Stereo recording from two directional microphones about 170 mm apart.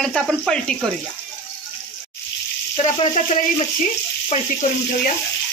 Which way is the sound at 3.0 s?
40° left (ahead or behind).